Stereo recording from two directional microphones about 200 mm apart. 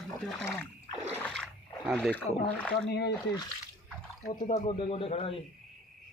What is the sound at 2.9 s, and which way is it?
Speech, 55° left (ahead or behind).